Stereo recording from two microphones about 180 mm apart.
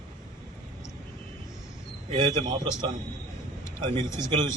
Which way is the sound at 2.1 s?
25° right (ahead or behind).